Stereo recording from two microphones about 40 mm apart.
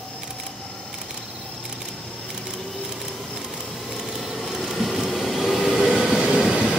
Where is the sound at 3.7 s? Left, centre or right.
Centre.